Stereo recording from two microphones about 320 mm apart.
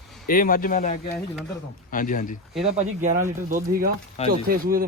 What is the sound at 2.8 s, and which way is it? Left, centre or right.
Speech, right.